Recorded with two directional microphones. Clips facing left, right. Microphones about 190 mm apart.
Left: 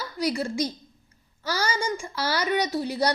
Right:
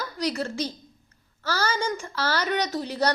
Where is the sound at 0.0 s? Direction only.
10° left (ahead or behind).